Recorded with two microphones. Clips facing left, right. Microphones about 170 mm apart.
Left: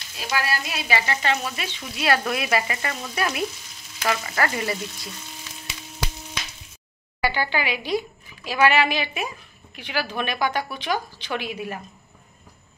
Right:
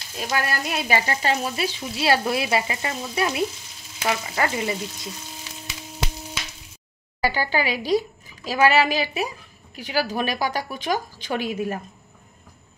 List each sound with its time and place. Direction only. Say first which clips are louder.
0.2 s frying: right 1 dB; 45° right (ahead or behind); by 5.1 s 20° right (ahead or behind)
7.2 s frying: right 1 dB; 40° right (ahead or behind)